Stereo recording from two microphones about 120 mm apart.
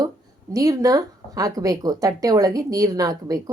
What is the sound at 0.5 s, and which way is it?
Speech, 30° right (ahead or behind).